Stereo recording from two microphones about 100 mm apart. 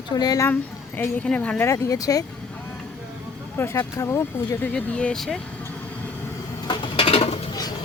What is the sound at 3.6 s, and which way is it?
Speech, 25° left (ahead or behind).